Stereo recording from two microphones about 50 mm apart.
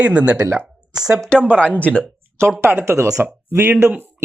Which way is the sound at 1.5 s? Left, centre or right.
Left.